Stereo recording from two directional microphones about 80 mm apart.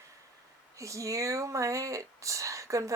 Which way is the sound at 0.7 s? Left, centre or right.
Right.